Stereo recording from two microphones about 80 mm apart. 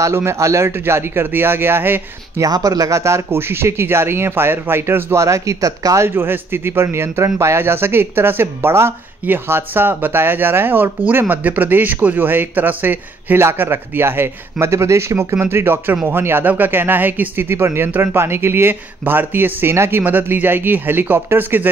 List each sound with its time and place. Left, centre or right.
0.0 s a man's voice: right
2.4 s a man's voice: right
6.0 s a man's voice: right